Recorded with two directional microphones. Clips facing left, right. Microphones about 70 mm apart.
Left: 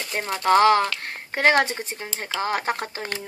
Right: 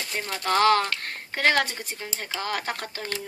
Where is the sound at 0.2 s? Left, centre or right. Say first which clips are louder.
Left 5 dB; left.